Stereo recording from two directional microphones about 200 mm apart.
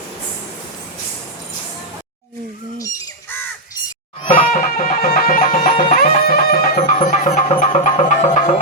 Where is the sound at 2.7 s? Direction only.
15° left (ahead or behind).